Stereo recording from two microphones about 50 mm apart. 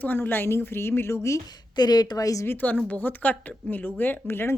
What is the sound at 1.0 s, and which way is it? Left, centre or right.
Speech, left.